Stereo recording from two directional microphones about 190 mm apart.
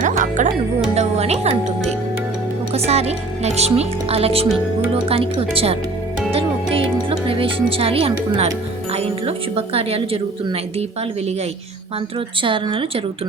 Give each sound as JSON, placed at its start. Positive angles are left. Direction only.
{"t": 0.0, "sound": "music", "side_deg": -40}
{"t": 0.9, "sound": "speech", "side_deg": -35}
{"t": 2.7, "sound": "speech", "side_deg": -35}
{"t": 6.3, "sound": "music", "side_deg": -30}
{"t": 8.9, "sound": "speech", "side_deg": -30}
{"t": 12.4, "sound": "speech", "side_deg": -25}